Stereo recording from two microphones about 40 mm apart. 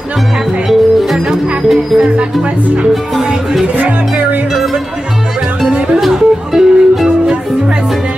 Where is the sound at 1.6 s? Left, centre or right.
Centre.